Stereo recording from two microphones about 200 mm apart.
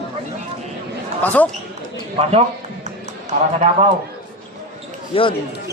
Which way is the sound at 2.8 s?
35° right (ahead or behind).